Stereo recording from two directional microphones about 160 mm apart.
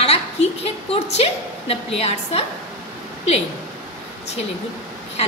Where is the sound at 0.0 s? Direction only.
40° left (ahead or behind).